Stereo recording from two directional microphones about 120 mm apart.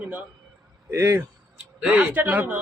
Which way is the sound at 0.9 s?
20° right (ahead or behind).